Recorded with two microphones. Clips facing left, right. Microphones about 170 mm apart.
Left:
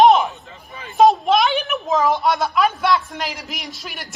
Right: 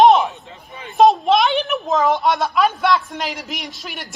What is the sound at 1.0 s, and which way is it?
A woman's voice, centre (ahead or behind).